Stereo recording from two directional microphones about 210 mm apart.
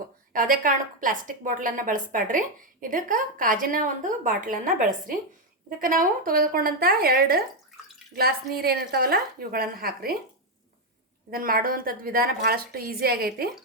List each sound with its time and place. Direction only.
0.3 s a woman's voice: 40° right (ahead or behind)
11.3 s a woman's voice: 45° right (ahead or behind)